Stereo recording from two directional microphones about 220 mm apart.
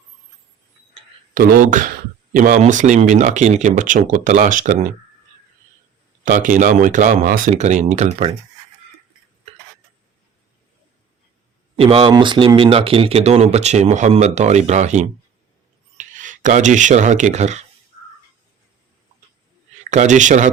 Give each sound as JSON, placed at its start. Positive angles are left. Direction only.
{"t": 1.3, "sound": "speech", "side_deg": -40}
{"t": 6.2, "sound": "speech", "side_deg": -35}
{"t": 11.8, "sound": "speech", "side_deg": -25}
{"t": 19.8, "sound": "speech", "side_deg": -35}